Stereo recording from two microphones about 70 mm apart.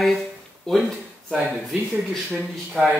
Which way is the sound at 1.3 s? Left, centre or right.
Centre.